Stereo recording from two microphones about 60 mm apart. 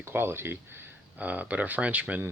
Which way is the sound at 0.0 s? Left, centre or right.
Right.